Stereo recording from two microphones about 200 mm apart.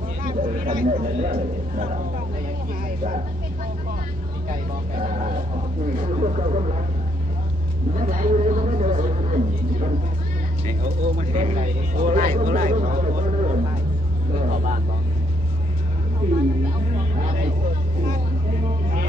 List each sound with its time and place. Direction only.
0.2 s a sound: 45° right (ahead or behind)
1.0 s speech: 40° right (ahead or behind)
4.9 s speech: 40° right (ahead or behind)
7.9 s speech: 40° right (ahead or behind)